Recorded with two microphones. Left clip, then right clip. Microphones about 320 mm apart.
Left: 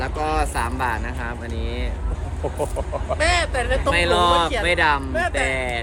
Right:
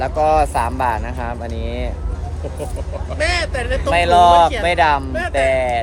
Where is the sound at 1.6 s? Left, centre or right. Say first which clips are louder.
Right 4 dB; right.